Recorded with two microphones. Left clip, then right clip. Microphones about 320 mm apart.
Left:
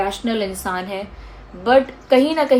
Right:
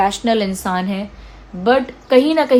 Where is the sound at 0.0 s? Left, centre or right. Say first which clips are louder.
Right 5 dB; right.